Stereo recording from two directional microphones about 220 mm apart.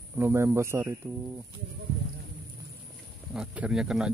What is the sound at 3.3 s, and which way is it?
Speech, 5° right (ahead or behind).